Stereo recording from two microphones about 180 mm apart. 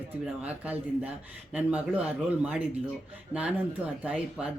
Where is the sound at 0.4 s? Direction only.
10° right (ahead or behind).